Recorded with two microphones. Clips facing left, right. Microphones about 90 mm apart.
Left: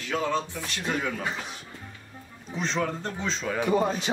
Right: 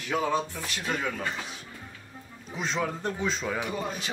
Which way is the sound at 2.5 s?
5° right (ahead or behind).